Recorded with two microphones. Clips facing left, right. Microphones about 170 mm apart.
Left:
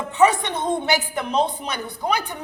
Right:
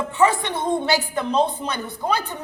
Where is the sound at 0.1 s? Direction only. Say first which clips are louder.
Left 3 dB; 20° left (ahead or behind).